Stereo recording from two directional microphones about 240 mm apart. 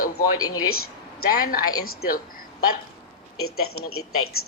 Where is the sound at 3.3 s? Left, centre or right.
Left.